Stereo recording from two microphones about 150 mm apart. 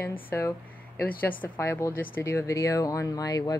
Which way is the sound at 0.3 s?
15° left (ahead or behind).